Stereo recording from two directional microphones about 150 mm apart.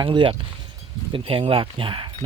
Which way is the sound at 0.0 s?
30° right (ahead or behind).